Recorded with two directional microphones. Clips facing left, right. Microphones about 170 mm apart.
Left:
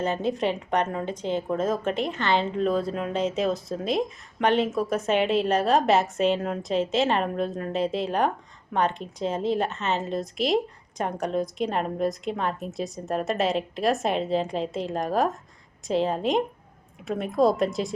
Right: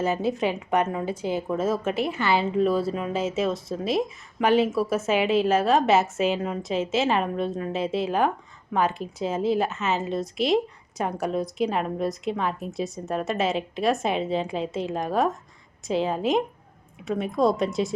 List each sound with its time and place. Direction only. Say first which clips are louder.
0.0 s a woman's voice: right 1 dB; 5° right (ahead or behind)